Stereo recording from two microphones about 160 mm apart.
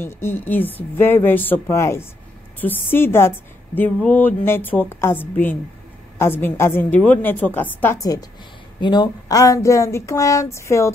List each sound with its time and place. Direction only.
0.0 s a woman's voice: 15° left (ahead or behind)